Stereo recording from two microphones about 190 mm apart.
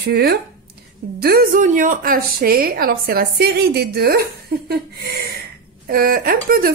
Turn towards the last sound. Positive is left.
turn(degrees=-50)  # may be behind; listen again after turning